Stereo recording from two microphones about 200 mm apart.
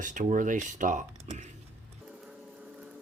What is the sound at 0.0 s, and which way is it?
Speech, 40° right (ahead or behind).